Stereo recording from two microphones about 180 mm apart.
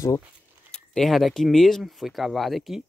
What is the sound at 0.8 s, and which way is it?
Speech, centre (ahead or behind).